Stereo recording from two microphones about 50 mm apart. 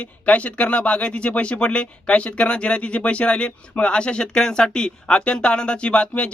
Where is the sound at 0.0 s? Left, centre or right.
Left.